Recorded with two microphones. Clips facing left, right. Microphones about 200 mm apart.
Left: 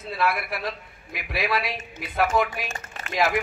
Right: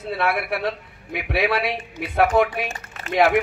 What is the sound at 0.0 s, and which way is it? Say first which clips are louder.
A man's voice: right 3 dB; 65° right (ahead or behind).